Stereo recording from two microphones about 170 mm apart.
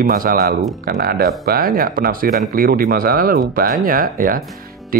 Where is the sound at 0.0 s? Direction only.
55° right (ahead or behind).